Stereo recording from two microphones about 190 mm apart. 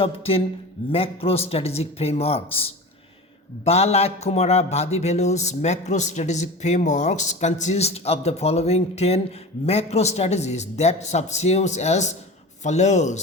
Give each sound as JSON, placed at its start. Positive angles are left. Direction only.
{"t": 0.0, "sound": "a man's voice", "side_deg": 30}